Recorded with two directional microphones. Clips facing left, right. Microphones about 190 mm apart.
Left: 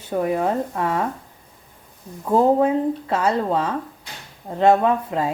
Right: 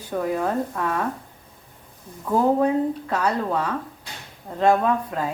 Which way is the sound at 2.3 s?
25° left (ahead or behind).